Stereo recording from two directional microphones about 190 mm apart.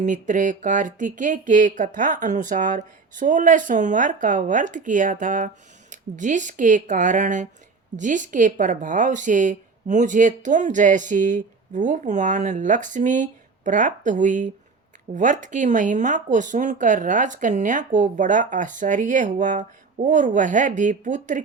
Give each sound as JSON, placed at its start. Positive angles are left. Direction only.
{"t": 0.0, "sound": "a woman's voice", "side_deg": -40}